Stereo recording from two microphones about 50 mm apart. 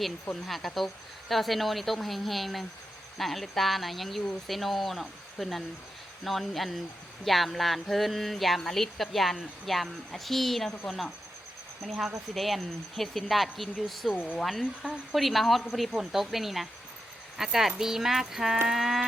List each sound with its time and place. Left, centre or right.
0.4 s speech: centre
11.8 s speech: centre
14.1 s speech: left
14.3 s speech: centre
18.7 s music: centre